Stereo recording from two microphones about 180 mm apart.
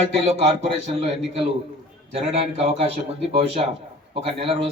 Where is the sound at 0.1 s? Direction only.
35° right (ahead or behind).